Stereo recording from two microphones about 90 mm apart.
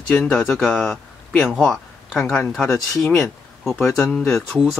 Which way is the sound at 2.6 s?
30° left (ahead or behind).